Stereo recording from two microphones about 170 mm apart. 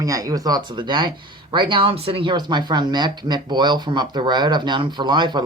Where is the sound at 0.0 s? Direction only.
20° right (ahead or behind).